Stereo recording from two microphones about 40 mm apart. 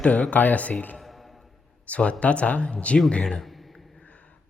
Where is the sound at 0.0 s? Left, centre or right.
Left.